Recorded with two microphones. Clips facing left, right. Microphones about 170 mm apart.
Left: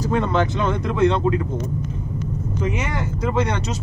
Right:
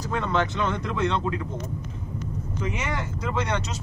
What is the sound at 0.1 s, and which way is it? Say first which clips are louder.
Speech: left 4 dB; 35° left (ahead or behind).